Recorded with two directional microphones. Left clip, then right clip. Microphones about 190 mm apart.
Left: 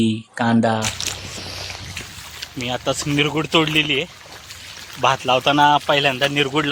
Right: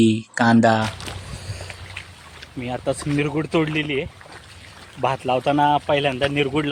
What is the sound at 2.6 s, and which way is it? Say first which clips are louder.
Speech: left 2 dB; 20° left (ahead or behind).